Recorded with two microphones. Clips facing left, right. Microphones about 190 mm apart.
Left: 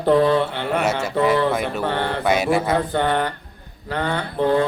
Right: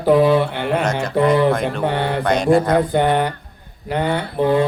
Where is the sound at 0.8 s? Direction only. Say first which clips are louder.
Right 1 dB; 5° left (ahead or behind).